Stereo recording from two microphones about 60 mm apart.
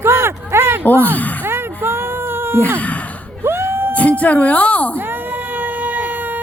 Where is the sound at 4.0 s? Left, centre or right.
Left.